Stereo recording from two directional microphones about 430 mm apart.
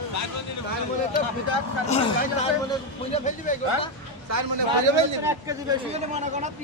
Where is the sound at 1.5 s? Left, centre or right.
Right.